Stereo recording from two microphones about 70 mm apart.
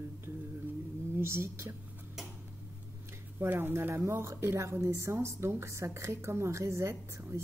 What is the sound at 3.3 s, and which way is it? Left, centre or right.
A woman's voice, right.